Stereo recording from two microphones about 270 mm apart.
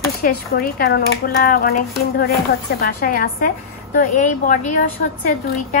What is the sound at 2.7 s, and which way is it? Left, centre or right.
A woman's voice, left.